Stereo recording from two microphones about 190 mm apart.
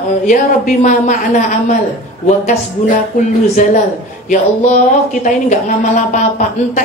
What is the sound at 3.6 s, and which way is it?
Speech, 40° left (ahead or behind).